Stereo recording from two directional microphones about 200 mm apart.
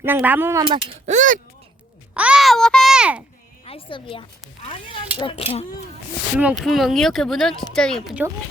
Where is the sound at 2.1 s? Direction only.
5° right (ahead or behind).